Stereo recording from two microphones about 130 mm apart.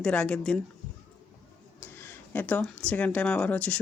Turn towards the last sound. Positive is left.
turn(degrees=10)  # may be behind; listen again after turning